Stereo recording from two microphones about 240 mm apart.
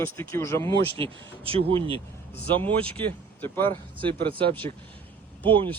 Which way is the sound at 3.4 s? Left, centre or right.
Centre.